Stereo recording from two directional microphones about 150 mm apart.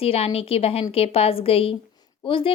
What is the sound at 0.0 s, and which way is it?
Speech, 40° left (ahead or behind).